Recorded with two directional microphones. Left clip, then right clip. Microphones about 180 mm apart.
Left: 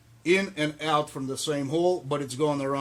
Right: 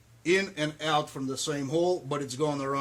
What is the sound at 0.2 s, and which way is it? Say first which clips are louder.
Speech: left 2 dB; 30° left (ahead or behind).